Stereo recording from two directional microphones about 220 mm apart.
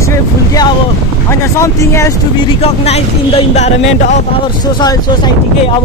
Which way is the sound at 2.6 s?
30° left (ahead or behind).